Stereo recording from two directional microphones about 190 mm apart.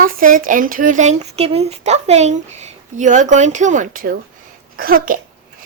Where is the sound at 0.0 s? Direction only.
45° right (ahead or behind).